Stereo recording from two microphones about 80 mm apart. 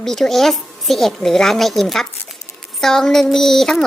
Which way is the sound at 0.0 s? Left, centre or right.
Centre.